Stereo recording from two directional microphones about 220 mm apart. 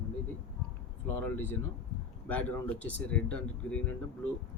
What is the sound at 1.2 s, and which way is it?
Speech, 10° left (ahead or behind).